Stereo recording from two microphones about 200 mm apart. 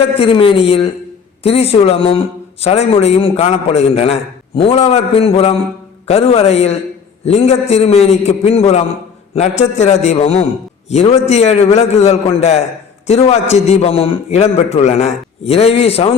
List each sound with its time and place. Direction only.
0.2 s a man's voice: 25° left (ahead or behind)